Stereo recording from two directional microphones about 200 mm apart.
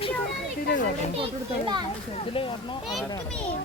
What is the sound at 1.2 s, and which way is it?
Speech, 25° right (ahead or behind).